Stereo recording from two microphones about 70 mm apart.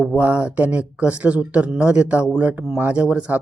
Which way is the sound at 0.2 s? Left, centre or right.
Centre.